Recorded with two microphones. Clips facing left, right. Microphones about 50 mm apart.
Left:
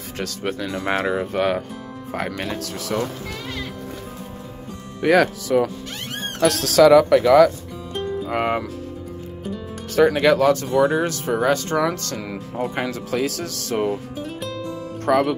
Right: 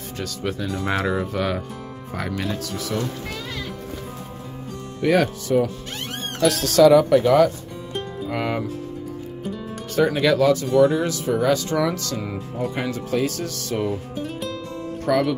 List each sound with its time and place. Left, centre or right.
0.7 s speech: left
2.6 s speech: left
5.0 s speech: left
6.6 s speech: left
7.9 s music: centre
8.3 s speech: left
9.9 s speech: left
10.2 s speech: left
11.4 s speech: left
12.2 s speech: left
12.7 s speech: left
14.1 s music: centre
15.0 s speech: left